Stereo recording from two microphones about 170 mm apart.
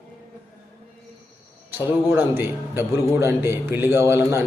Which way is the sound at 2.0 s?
15° right (ahead or behind).